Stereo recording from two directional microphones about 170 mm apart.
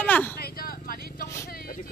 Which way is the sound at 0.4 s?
60° left (ahead or behind).